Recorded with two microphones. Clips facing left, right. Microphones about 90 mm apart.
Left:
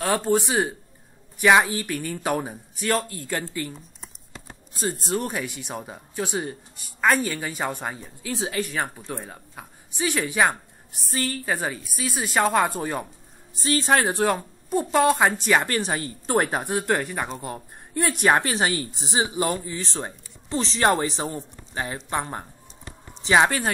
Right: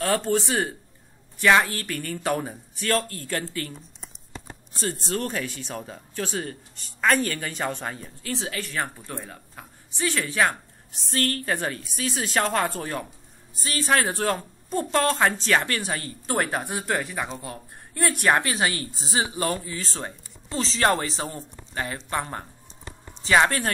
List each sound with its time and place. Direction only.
0.0 s speech: 15° left (ahead or behind)
5.1 s speech: 15° left (ahead or behind)
7.0 s speech: 5° left (ahead or behind)
11.1 s a woman's voice: 60° right (ahead or behind)
11.4 s speech: 10° left (ahead or behind)
13.6 s speech: 25° left (ahead or behind)
16.8 s speech: centre (ahead or behind)
18.4 s speech: 30° left (ahead or behind)